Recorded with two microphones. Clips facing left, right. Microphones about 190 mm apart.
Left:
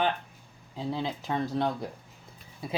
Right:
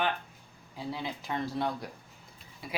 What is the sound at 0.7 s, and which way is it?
Speech, 25° left (ahead or behind).